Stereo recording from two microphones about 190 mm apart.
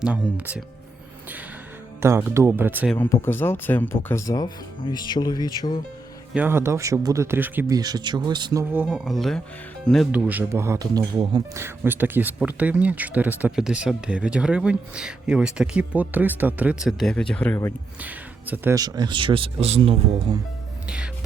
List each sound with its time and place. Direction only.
0.0 s speech: 5° right (ahead or behind)
2.0 s speech: 15° right (ahead or behind)
2.9 s speech: 10° left (ahead or behind)
6.3 s speech: 10° right (ahead or behind)
7.8 s speech: 20° right (ahead or behind)
8.7 s speech: 5° right (ahead or behind)
10.1 s speech: 10° right (ahead or behind); by 17.7 s 10° left (ahead or behind)
18.0 s speech: 10° right (ahead or behind); by 20.3 s 30° right (ahead or behind)
20.8 s speech: 5° right (ahead or behind)